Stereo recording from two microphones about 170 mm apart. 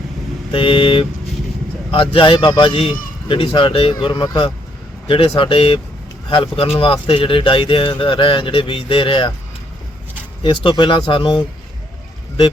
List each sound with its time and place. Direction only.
0.5 s speech: 30° left (ahead or behind)
10.4 s speech: 30° left (ahead or behind)